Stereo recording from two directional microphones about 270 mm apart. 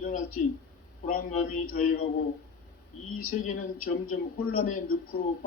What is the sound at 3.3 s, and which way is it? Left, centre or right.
Speech, left.